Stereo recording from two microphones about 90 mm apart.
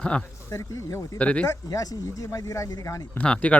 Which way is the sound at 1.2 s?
15° left (ahead or behind).